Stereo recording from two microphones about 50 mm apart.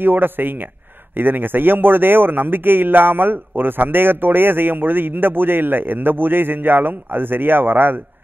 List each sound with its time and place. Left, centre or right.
0.0 s a man's voice: right